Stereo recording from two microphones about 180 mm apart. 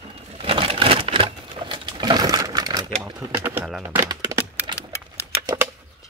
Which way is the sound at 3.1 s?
20° right (ahead or behind).